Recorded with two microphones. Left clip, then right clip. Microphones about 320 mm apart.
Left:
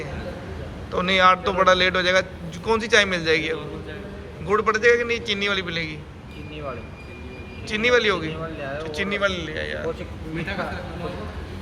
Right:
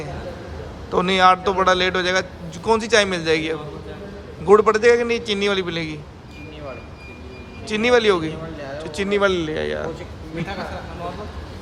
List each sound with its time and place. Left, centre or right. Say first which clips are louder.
0.9 s a man's voice: right 2 dB; centre
7.7 s a man's voice: right 3 dB; centre